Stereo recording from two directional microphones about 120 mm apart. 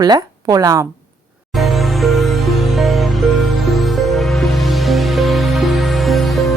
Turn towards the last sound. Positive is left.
turn(degrees=0)  # may be behind; listen again after turning